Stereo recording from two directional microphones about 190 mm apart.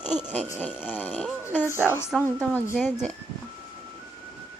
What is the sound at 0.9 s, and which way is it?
Speech, 10° left (ahead or behind).